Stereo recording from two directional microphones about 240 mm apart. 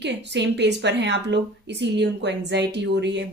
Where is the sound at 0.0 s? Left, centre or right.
Right.